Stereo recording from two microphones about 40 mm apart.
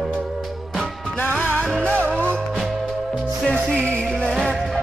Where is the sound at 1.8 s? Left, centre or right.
Left.